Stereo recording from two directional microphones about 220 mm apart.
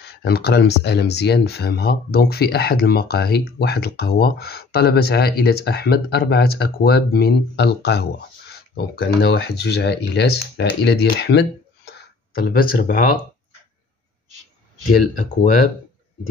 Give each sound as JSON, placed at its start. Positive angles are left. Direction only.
{"t": 0.0, "sound": "speech", "side_deg": 50}